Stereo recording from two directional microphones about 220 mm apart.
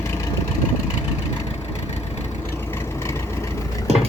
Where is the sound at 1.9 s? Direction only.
30° left (ahead or behind).